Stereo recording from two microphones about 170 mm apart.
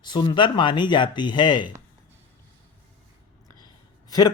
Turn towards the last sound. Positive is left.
turn(degrees=20)  # may be behind; listen again after turning